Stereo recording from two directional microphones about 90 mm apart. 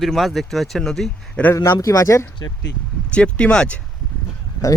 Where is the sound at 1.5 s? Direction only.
30° left (ahead or behind).